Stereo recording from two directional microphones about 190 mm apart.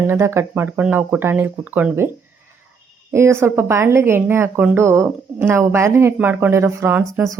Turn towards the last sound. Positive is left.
turn(degrees=-10)  # may be behind; listen again after turning